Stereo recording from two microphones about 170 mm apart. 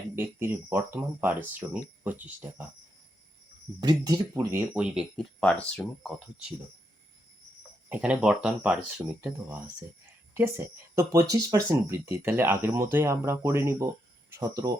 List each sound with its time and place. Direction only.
0.2 s speech: 15° right (ahead or behind)
3.8 s speech: 25° right (ahead or behind); by 6.1 s 5° left (ahead or behind)
7.9 s speech: 10° right (ahead or behind)
10.3 s speech: 15° right (ahead or behind)